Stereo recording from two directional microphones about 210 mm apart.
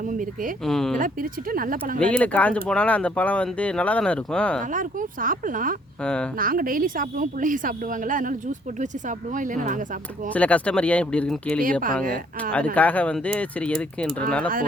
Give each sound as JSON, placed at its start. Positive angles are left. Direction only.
{"t": 0.1, "sound": "speech", "side_deg": -40}
{"t": 0.6, "sound": "speech", "side_deg": 0}
{"t": 0.9, "sound": "a woman's voice", "side_deg": -40}
{"t": 2.0, "sound": "speech", "side_deg": 5}
{"t": 4.7, "sound": "a woman's voice", "side_deg": -40}
{"t": 6.0, "sound": "speech", "side_deg": 5}
{"t": 6.4, "sound": "a woman's voice", "side_deg": -40}
{"t": 10.3, "sound": "speech", "side_deg": 5}